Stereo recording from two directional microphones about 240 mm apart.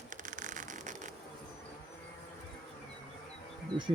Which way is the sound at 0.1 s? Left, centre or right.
Right.